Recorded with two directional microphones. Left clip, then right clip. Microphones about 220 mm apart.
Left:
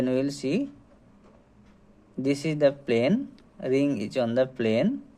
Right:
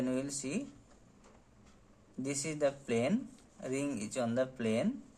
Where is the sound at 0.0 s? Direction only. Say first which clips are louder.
Left 10 dB; 30° left (ahead or behind).